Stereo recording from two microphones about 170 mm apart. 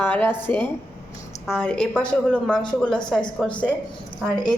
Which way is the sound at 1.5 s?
5° left (ahead or behind).